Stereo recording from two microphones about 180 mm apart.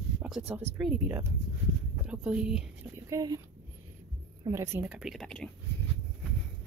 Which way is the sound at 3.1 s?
20° right (ahead or behind).